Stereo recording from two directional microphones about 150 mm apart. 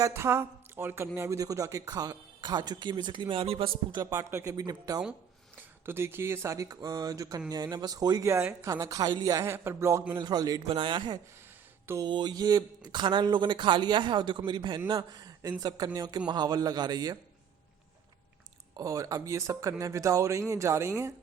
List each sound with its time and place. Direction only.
0.0 s speech: 20° right (ahead or behind); by 3.7 s 40° right (ahead or behind)
3.9 s speech: 20° right (ahead or behind)
5.8 s speech: 15° right (ahead or behind)
8.3 s speech: 15° right (ahead or behind)
10.2 s speech: 30° right (ahead or behind)
18.8 s speech: 20° right (ahead or behind)